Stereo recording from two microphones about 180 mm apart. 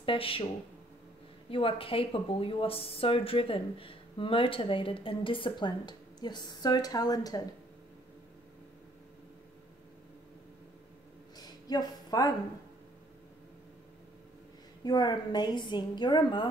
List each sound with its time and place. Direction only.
0.0 s speech: 30° left (ahead or behind)
1.5 s speech: 30° left (ahead or behind)
11.3 s a sound: 20° left (ahead or behind)
14.9 s speech: 25° left (ahead or behind)